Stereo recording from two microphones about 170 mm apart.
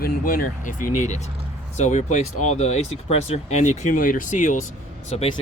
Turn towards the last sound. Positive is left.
turn(degrees=35)  # may be behind; listen again after turning